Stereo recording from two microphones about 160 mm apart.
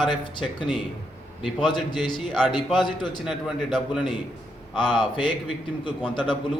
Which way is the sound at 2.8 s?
30° left (ahead or behind).